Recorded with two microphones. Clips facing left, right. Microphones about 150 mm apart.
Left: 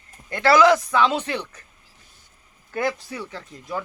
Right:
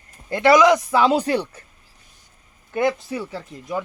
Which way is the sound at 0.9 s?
30° right (ahead or behind).